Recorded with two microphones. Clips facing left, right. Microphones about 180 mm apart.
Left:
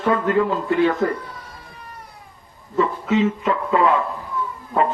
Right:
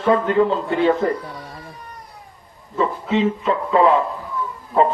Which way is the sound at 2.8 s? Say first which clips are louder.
Even; 30° right (ahead or behind).